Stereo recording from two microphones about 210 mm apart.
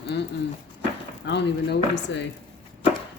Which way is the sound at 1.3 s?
55° left (ahead or behind).